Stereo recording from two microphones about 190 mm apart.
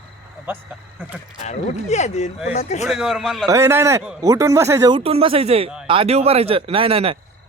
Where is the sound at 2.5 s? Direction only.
35° left (ahead or behind).